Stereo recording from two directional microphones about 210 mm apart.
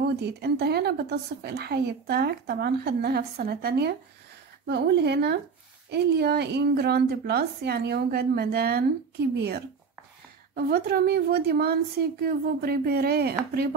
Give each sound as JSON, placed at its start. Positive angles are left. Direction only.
{"t": 0.0, "sound": "a woman's voice", "side_deg": -50}